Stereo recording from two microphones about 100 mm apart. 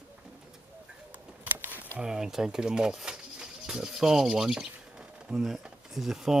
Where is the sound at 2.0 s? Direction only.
5° right (ahead or behind).